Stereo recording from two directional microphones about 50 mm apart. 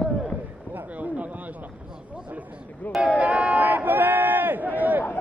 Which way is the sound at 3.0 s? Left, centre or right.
Right.